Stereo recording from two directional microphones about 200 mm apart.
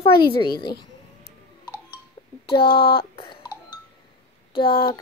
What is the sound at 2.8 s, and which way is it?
Speech, 50° left (ahead or behind).